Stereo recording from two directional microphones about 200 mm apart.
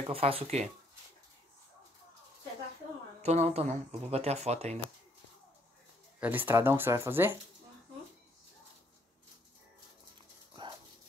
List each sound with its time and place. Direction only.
0.1 s speech: 30° right (ahead or behind)
3.2 s speech: 35° right (ahead or behind)
6.1 s speech: 10° right (ahead or behind)